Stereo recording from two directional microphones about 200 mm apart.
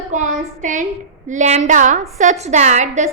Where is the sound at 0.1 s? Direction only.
40° right (ahead or behind).